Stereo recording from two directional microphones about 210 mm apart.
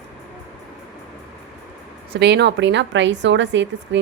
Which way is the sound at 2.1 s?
55° right (ahead or behind).